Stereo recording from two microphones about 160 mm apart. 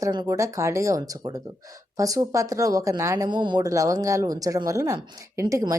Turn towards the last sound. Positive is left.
turn(degrees=-20)  # may be behind; listen again after turning